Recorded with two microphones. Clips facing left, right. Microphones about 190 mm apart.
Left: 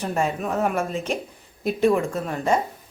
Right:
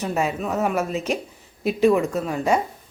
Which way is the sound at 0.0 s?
5° right (ahead or behind).